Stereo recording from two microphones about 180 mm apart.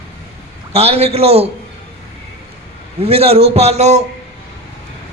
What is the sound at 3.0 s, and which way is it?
Speech, 35° right (ahead or behind).